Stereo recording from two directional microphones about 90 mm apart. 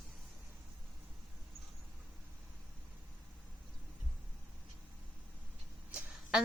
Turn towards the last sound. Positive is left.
turn(degrees=-10)  # may be behind; listen again after turning